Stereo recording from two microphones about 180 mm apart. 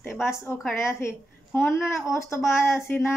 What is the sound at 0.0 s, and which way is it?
A woman's voice, 15° left (ahead or behind).